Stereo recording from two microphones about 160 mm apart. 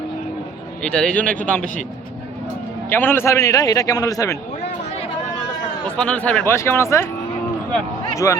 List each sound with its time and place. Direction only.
0.8 s a man's voice: 5° left (ahead or behind)
1.2 s speech: 60° right (ahead or behind)
1.5 s speech: 5° left (ahead or behind)
2.9 s a man's voice: 15° left (ahead or behind)
6.0 s speech: 5° left (ahead or behind)
8.1 s speech: 20° left (ahead or behind)